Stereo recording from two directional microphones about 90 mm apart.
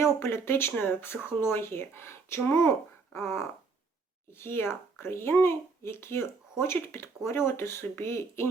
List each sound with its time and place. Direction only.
0.0 s a child's voice: 30° left (ahead or behind)